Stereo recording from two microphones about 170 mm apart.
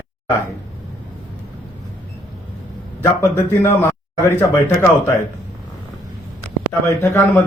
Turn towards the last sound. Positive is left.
turn(degrees=10)  # may be behind; listen again after turning